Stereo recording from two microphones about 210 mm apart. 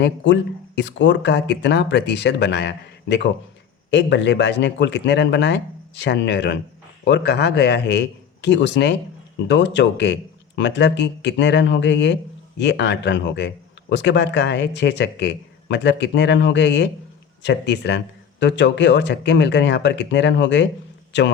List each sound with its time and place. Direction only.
0.2 s a man's voice: 60° left (ahead or behind)